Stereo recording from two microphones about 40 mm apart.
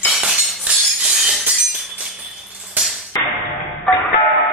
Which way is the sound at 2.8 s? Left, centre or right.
Right.